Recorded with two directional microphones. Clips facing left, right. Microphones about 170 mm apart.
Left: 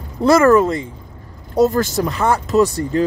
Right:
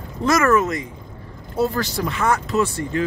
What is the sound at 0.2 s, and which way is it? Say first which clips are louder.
Speech: left 6 dB; 30° left (ahead or behind).